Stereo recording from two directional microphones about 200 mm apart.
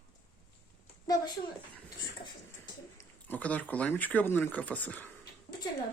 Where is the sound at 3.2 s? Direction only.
10° left (ahead or behind).